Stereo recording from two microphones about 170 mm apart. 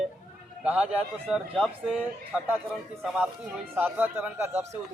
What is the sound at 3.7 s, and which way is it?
Speech, 10° right (ahead or behind).